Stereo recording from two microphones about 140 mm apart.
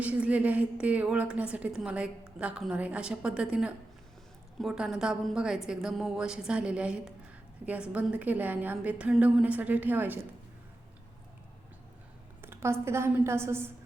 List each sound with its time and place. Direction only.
0.0 s a woman's voice: 10° right (ahead or behind)
12.4 s a woman's voice: 15° right (ahead or behind)